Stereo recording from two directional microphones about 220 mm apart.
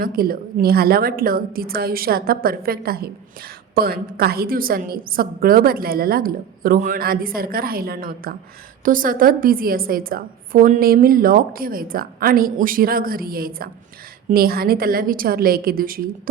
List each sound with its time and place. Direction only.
0.0 s a woman's voice: 40° right (ahead or behind)